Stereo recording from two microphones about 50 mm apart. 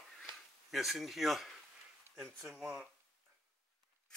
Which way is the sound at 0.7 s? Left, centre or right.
Centre.